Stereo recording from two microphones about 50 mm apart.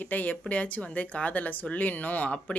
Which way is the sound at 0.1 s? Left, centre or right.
Left.